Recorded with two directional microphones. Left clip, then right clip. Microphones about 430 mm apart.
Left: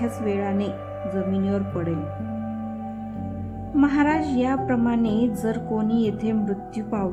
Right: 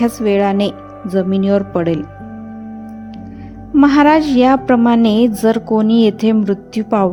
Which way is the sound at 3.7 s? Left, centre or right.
Centre.